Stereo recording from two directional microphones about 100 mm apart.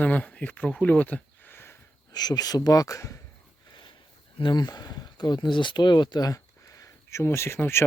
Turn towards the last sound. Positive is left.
turn(degrees=25)  # may be behind; listen again after turning